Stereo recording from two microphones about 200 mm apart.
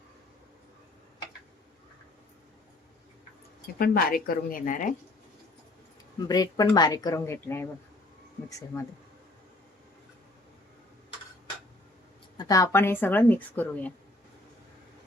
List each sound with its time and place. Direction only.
3.8 s a woman's voice: 50° left (ahead or behind)
6.1 s speech: 20° left (ahead or behind)
12.4 s speech: 15° left (ahead or behind)